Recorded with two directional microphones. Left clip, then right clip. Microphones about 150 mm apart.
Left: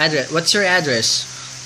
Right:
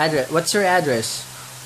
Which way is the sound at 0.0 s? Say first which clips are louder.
Left 2 dB; 35° right (ahead or behind).